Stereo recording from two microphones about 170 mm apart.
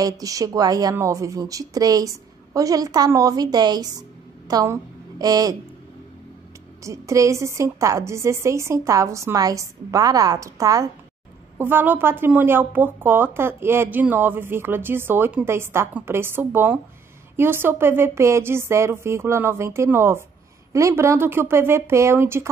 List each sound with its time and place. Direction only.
0.0 s a woman's voice: 20° right (ahead or behind)
6.8 s speech: 20° right (ahead or behind)